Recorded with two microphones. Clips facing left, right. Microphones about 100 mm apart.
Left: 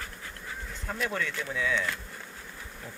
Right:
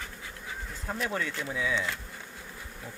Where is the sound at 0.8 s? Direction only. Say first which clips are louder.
Even; 20° right (ahead or behind).